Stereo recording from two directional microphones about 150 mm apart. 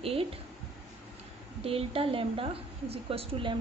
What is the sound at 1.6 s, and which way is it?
A woman's voice, 40° right (ahead or behind).